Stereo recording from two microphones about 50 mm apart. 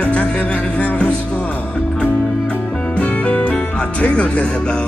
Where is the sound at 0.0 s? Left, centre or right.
Left.